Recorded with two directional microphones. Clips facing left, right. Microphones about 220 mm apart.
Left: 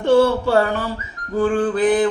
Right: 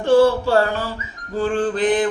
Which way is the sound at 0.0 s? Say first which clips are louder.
Even; 20° left (ahead or behind).